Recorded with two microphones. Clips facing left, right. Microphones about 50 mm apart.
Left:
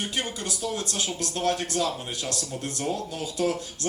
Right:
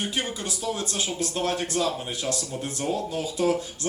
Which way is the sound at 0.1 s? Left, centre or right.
Centre.